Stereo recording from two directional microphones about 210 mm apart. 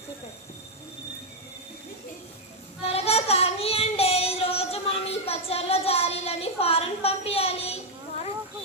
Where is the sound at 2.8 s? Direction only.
30° left (ahead or behind).